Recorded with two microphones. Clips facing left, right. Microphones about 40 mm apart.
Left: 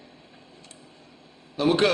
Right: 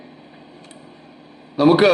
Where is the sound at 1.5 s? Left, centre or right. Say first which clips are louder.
Right 8 dB; right.